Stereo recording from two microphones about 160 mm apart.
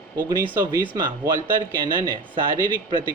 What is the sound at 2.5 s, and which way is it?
Speech, 60° right (ahead or behind).